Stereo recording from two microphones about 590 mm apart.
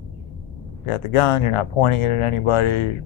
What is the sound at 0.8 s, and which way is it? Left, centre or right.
Speech, left.